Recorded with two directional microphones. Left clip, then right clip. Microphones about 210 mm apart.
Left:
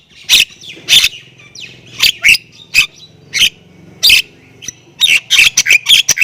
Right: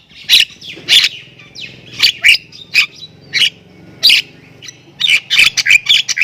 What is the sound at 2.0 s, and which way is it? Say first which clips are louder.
Bird: even; 10° left (ahead or behind).